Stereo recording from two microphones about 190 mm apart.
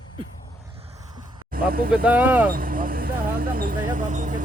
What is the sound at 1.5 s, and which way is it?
Vehicle, 50° right (ahead or behind).